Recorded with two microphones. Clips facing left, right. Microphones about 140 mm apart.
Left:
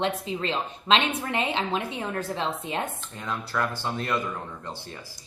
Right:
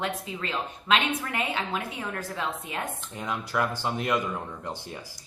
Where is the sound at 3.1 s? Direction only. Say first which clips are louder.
Right 1 dB; 15° right (ahead or behind).